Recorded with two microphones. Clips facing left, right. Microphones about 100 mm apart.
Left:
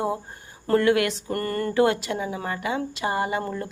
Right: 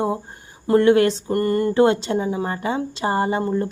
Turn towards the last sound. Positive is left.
turn(degrees=-30)  # may be behind; listen again after turning